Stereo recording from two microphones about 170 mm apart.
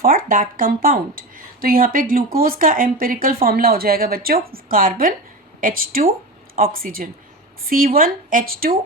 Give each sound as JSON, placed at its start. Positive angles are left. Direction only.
{"t": 0.0, "sound": "speech", "side_deg": -55}